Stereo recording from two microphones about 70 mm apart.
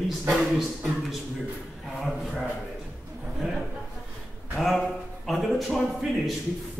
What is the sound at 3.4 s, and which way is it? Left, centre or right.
Speech, centre.